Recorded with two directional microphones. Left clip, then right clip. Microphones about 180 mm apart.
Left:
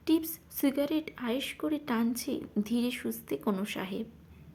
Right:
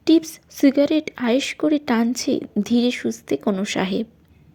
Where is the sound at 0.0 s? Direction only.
30° right (ahead or behind).